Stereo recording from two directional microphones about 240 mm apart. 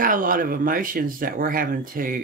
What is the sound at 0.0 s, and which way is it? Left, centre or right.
Speech, right.